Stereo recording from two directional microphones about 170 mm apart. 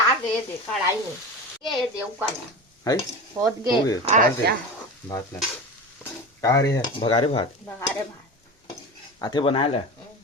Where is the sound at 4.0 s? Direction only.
45° right (ahead or behind).